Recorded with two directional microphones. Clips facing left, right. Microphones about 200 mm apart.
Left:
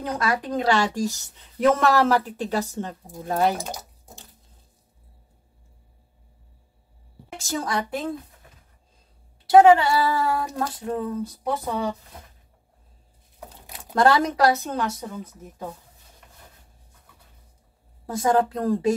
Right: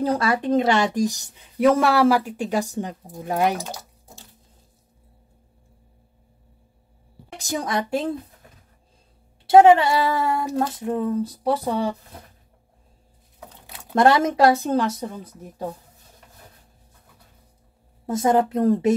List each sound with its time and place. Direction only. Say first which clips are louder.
0.0 s a woman's voice: right 5 dB; 30° right (ahead or behind)
3.5 s a sound: right 1 dB; 15° left (ahead or behind)
7.3 s speech: right 2 dB; 15° right (ahead or behind)
9.5 s speech: right 1 dB; 25° right (ahead or behind)
13.9 s speech: right 2 dB; 25° right (ahead or behind)
18.0 s speech: right 2 dB; 20° right (ahead or behind)